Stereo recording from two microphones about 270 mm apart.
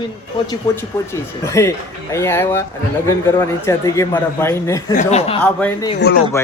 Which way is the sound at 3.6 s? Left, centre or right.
Centre.